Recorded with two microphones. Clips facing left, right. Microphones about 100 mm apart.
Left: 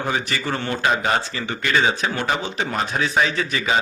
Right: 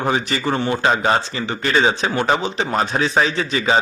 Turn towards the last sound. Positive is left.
turn(degrees=-30)  # may be behind; listen again after turning